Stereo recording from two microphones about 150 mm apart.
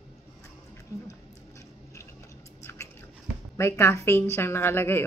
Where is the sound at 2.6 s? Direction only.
15° left (ahead or behind).